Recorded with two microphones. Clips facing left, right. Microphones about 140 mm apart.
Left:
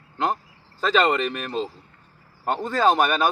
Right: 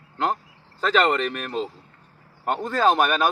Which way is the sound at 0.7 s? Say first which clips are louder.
Even; 5° left (ahead or behind).